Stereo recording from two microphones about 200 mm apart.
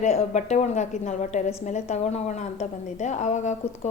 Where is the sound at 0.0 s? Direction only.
35° left (ahead or behind).